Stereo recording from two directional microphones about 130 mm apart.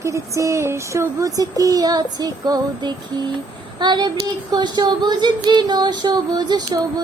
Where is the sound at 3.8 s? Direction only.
35° right (ahead or behind).